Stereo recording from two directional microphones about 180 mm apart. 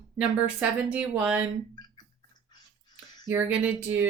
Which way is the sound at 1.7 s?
25° left (ahead or behind).